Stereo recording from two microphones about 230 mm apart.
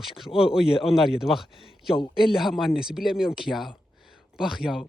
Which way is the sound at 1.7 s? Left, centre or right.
Centre.